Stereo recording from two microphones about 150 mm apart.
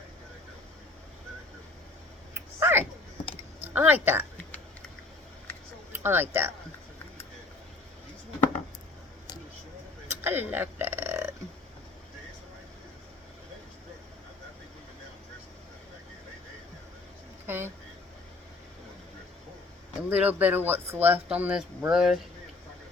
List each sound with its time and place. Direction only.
2.3 s clicking: 15° right (ahead or behind)
3.6 s a sound: 15° right (ahead or behind)
5.9 s speech: 15° right (ahead or behind)
10.2 s burping: 15° right (ahead or behind)
17.4 s a sound: 15° right (ahead or behind)
20.1 s speech: 10° right (ahead or behind)